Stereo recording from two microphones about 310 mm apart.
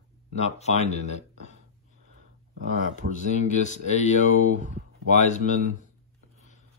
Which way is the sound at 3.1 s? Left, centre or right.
Left.